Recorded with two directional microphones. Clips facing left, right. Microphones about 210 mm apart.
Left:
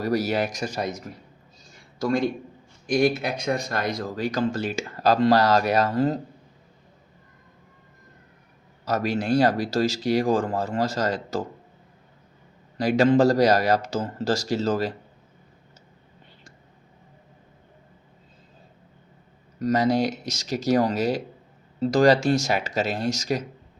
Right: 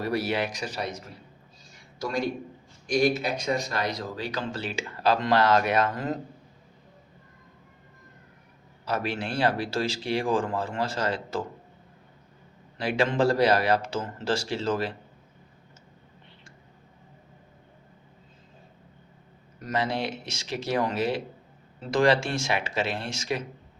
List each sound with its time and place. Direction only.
0.0 s speech: 40° left (ahead or behind)
2.0 s a man's voice: 50° left (ahead or behind); by 6.1 s 35° left (ahead or behind)
8.8 s speech: 40° left (ahead or behind)
12.7 s speech: 40° left (ahead or behind)
19.6 s speech: 40° left (ahead or behind)